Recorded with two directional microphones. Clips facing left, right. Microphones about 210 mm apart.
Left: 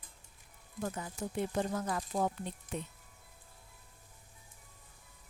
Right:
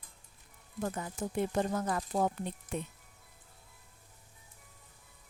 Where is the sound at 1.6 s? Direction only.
55° right (ahead or behind).